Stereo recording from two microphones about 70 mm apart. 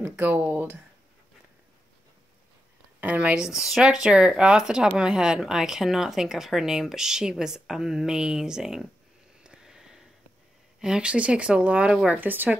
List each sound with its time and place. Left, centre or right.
0.0 s speech: right
3.0 s speech: right
9.4 s a sound: centre
10.8 s speech: centre
12.1 s speech: right